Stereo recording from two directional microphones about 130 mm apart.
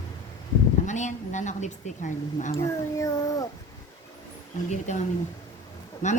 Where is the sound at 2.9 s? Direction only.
25° left (ahead or behind).